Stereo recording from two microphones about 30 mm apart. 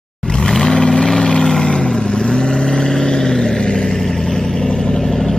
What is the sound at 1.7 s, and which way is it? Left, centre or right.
Vehicle, left.